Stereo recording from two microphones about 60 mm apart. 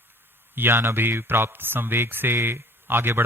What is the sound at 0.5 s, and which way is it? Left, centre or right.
Speech, right.